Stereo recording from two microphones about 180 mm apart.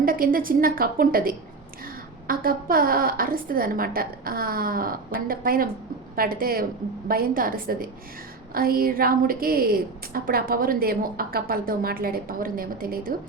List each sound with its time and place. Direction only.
0.0 s a woman's voice: 50° right (ahead or behind)